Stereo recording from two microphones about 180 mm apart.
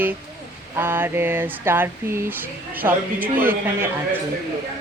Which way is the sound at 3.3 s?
50° right (ahead or behind).